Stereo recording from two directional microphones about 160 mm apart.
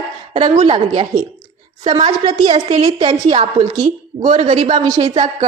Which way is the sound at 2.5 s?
45° right (ahead or behind).